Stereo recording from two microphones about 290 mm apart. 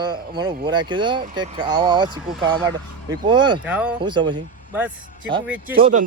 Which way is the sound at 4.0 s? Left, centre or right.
Centre.